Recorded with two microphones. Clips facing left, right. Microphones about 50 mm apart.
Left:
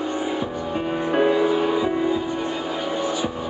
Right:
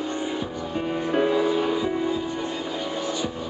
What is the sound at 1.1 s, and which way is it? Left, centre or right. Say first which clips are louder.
Music: left 3 dB; left.